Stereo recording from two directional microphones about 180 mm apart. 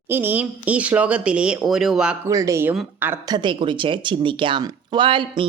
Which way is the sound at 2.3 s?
20° right (ahead or behind).